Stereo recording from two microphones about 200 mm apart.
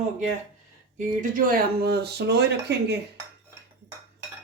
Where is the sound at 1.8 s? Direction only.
55° right (ahead or behind).